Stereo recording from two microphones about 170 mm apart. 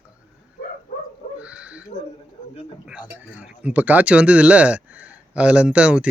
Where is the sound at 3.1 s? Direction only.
10° right (ahead or behind).